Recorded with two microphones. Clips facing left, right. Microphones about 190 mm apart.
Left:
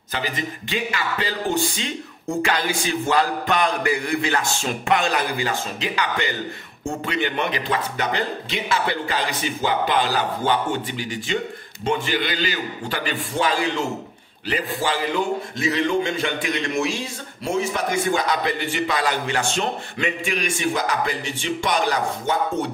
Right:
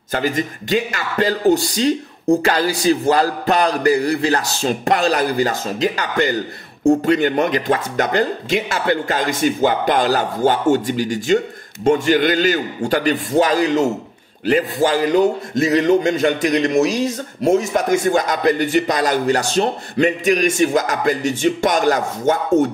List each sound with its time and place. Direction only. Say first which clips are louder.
0.1 s a man's voice: right 7 dB; 45° right (ahead or behind)